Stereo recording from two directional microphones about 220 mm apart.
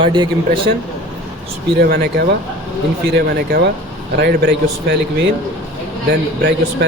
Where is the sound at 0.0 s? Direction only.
20° right (ahead or behind).